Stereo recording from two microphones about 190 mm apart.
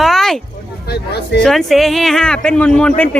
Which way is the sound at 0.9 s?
60° left (ahead or behind).